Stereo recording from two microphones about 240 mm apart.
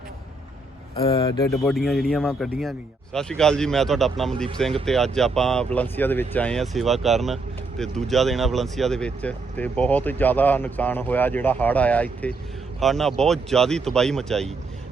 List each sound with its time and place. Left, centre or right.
0.9 s speech: left
1.6 s speech: centre